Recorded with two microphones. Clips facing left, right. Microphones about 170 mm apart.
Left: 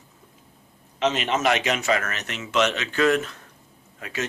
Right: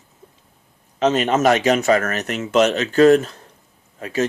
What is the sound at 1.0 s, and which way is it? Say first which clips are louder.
Speech: right 6 dB; 40° right (ahead or behind).